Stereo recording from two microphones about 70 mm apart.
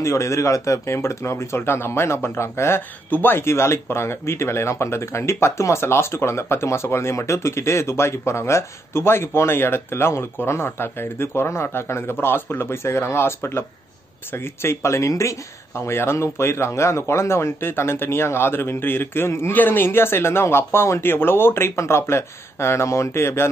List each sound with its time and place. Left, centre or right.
0.0 s speech: left
3.1 s speech: left